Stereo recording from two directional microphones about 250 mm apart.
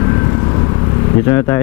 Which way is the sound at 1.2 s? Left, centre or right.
Centre.